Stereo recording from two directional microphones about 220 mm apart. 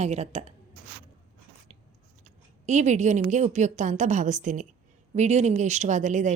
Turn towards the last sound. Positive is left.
turn(degrees=-35)  # may be behind; listen again after turning